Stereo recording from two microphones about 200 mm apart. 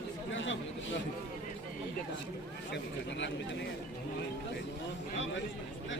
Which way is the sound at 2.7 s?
65° left (ahead or behind).